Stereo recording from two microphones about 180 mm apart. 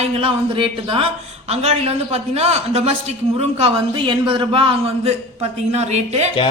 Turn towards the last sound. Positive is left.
turn(degrees=-40)  # may be behind; listen again after turning